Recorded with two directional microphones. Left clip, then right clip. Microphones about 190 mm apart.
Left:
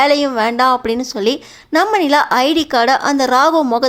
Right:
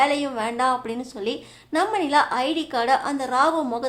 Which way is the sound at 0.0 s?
35° left (ahead or behind).